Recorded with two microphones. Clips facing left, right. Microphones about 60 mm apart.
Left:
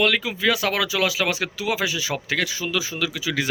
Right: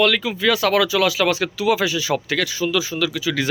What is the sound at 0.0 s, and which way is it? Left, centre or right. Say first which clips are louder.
Speech: right 3 dB; centre.